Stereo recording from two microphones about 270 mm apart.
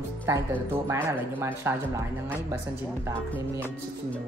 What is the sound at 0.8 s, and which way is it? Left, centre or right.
Speech, centre.